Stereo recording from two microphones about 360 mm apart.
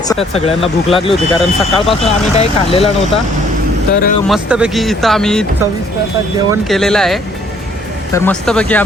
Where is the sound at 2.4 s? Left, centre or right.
Centre.